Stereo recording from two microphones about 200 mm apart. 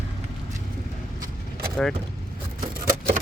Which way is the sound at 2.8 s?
45° right (ahead or behind).